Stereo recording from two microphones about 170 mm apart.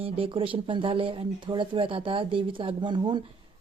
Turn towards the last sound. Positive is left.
turn(degrees=-25)  # may be behind; listen again after turning